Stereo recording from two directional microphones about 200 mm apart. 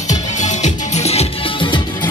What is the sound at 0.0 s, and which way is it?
Music, 35° left (ahead or behind).